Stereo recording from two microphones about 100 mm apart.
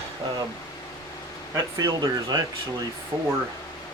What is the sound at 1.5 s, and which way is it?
Speech, 40° right (ahead or behind).